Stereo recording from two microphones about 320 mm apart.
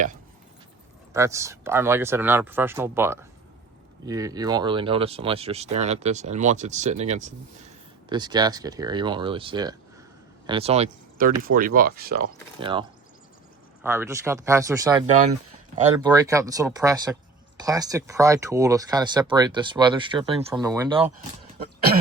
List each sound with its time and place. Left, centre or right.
1.1 s speech: centre; by 12.2 s right
12.5 s speech: centre
13.8 s speech: centre
21.6 s throat clearing: right